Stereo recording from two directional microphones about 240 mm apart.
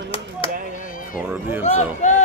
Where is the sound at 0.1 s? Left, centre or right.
Left.